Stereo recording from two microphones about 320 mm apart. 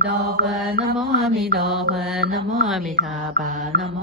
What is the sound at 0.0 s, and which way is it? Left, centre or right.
Mantra, right.